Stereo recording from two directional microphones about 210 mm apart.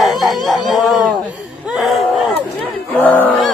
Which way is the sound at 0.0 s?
Centre (ahead or behind).